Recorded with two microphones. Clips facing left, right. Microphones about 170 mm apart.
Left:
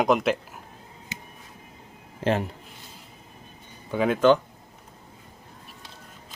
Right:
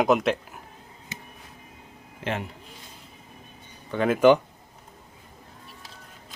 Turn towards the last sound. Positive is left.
turn(degrees=-10)  # may be behind; listen again after turning